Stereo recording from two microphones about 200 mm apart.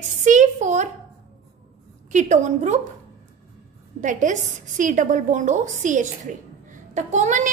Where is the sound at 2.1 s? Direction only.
35° right (ahead or behind).